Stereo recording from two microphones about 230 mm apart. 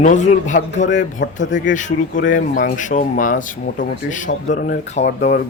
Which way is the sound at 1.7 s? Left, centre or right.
Left.